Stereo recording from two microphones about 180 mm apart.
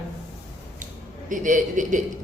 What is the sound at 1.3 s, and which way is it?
Speech, 45° right (ahead or behind).